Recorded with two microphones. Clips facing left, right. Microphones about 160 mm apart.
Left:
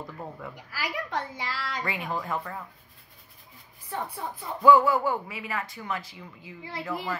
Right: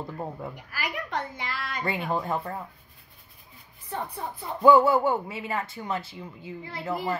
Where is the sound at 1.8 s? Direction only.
25° right (ahead or behind).